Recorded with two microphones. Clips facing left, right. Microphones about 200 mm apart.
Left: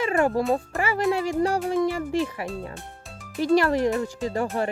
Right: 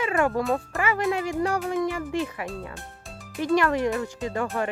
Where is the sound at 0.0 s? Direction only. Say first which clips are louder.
Left 2 dB; 35° left (ahead or behind).